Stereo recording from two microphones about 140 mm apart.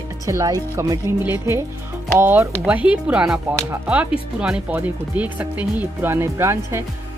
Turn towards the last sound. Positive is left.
turn(degrees=-20)  # may be behind; listen again after turning